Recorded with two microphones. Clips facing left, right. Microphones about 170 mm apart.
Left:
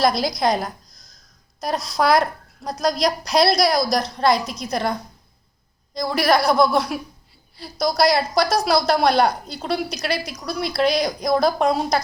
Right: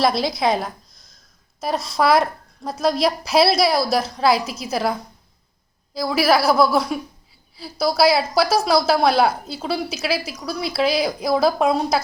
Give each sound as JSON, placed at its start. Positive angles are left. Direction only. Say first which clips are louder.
{"t": 0.0, "sound": "a woman's voice", "louder": "even", "side_deg": 0}